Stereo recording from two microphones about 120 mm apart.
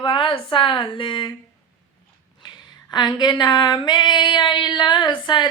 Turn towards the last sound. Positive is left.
turn(degrees=40)  # may be behind; listen again after turning